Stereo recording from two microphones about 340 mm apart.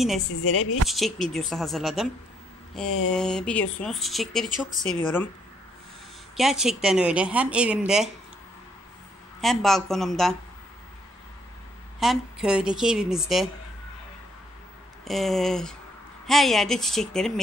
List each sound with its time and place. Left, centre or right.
0.3 s speech: left
0.8 s a woman's voice: centre
3.1 s a woman's voice: centre
6.3 s a woman's voice: centre
9.4 s a woman's voice: centre
12.0 s a woman's voice: centre
15.0 s a woman's voice: centre